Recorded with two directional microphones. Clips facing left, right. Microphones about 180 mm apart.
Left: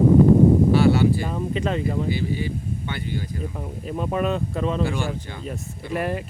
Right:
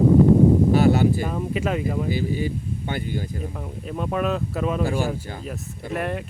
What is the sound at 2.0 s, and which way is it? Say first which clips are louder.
Speech: right 1 dB; 45° right (ahead or behind).